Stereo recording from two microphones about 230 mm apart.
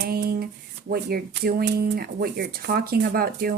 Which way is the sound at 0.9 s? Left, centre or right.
Right.